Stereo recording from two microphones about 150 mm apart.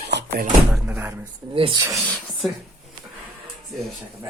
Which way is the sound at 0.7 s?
10° right (ahead or behind).